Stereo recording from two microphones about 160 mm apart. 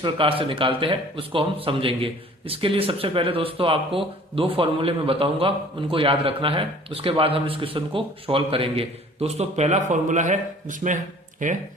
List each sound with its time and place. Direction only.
0.0 s speech: 35° right (ahead or behind); by 11.5 s 50° right (ahead or behind)